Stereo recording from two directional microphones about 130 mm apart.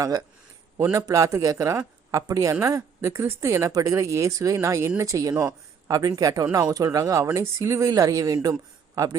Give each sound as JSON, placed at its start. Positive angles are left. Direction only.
{"t": 0.0, "sound": "speech", "side_deg": -30}